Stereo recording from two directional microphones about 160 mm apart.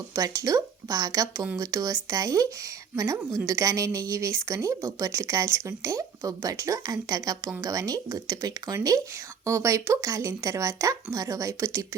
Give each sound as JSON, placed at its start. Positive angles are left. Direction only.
{"t": 0.1, "sound": "a woman's voice", "side_deg": -20}